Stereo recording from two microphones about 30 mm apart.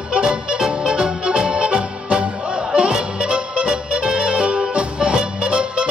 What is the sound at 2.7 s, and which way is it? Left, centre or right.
Music, right.